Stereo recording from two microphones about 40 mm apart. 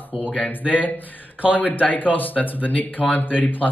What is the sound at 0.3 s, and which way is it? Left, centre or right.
A man's voice, left.